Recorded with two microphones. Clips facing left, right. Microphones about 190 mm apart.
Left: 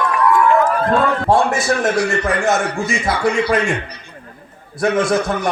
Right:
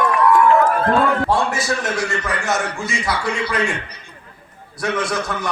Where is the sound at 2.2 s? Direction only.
50° left (ahead or behind).